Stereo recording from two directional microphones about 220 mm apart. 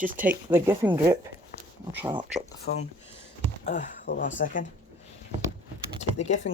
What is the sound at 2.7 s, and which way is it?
Speech, 55° left (ahead or behind).